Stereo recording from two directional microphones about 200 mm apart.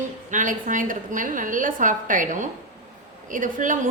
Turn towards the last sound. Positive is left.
turn(degrees=-40)  # may be behind; listen again after turning